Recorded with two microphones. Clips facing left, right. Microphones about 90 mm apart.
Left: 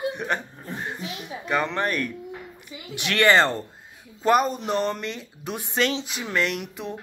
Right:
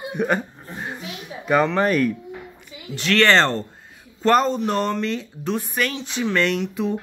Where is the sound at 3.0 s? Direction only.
15° left (ahead or behind).